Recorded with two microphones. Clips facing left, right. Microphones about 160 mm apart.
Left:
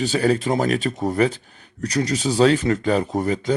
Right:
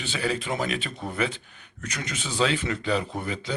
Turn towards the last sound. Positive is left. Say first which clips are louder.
# left 10 dB
turn(degrees=40)  # may be behind; listen again after turning